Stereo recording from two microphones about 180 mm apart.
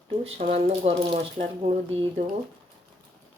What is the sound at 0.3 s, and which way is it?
Speech, 40° right (ahead or behind).